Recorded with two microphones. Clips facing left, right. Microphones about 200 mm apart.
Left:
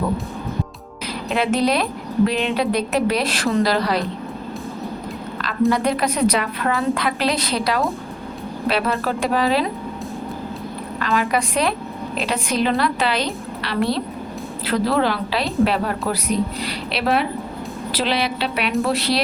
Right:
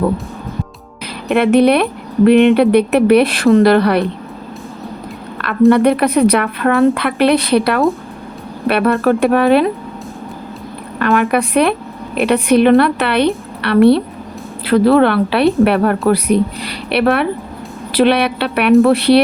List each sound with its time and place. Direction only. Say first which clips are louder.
1.3 s speech: right 9 dB; 60° right (ahead or behind)
5.4 s speech: right 9 dB; 60° right (ahead or behind)
11.0 s speech: right 7 dB; 60° right (ahead or behind)